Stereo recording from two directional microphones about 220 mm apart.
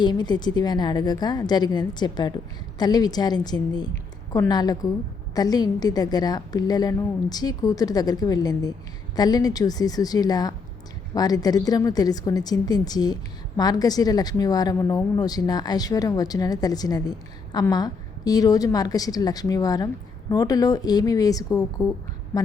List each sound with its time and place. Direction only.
0.0 s a woman's voice: 20° left (ahead or behind)